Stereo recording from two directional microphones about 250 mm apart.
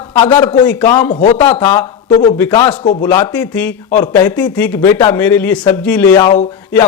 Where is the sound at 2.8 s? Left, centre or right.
Left.